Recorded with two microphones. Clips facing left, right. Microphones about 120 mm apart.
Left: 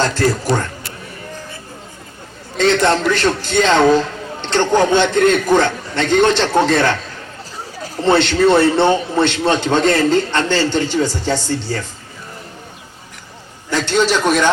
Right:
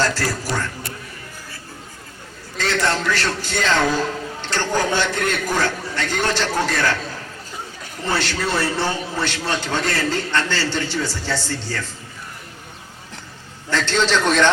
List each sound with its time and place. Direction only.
0.0 s a man's voice: 20° left (ahead or behind)
2.6 s a man's voice: 20° left (ahead or behind)
4.4 s a sound: 20° left (ahead or behind)
4.9 s a man's voice: 20° left (ahead or behind)
8.0 s a man's voice: 25° left (ahead or behind)
13.7 s a man's voice: 15° left (ahead or behind)